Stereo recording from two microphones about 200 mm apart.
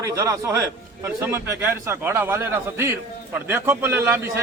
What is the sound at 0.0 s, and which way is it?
A man's voice, 15° right (ahead or behind).